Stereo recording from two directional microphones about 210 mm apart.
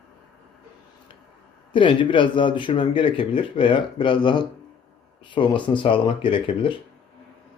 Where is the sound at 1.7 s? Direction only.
25° left (ahead or behind).